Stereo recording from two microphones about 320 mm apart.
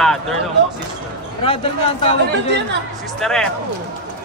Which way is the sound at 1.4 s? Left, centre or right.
Centre.